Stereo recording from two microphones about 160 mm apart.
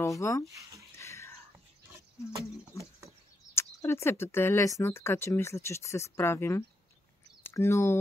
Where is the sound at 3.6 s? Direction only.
15° left (ahead or behind).